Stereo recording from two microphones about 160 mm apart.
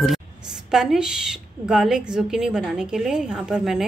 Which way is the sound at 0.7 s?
5° right (ahead or behind).